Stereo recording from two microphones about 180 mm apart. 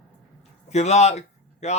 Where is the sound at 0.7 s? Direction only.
40° left (ahead or behind).